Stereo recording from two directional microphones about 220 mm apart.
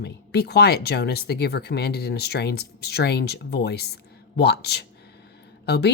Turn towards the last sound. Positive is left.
turn(degrees=50)  # may be behind; listen again after turning